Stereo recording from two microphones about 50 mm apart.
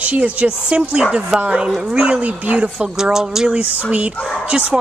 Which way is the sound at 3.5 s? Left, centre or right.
Right.